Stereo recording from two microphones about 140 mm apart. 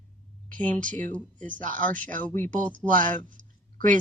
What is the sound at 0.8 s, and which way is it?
Speech, 65° right (ahead or behind).